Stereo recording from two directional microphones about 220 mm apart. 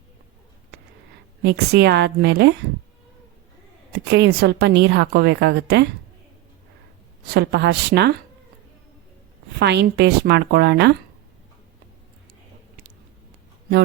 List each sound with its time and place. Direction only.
1.4 s a woman's voice: 50° right (ahead or behind)
4.1 s a woman's voice: 50° right (ahead or behind)
7.3 s a woman's voice: 50° right (ahead or behind)
9.6 s a woman's voice: 50° right (ahead or behind)